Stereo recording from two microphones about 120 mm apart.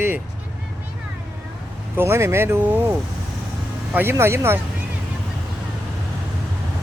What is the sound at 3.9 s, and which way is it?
Speech, 20° right (ahead or behind).